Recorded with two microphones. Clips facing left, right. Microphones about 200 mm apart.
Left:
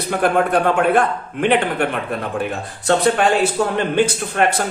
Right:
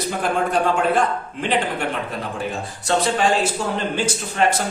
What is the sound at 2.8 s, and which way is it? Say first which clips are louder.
Speech: left 4 dB; 60° left (ahead or behind).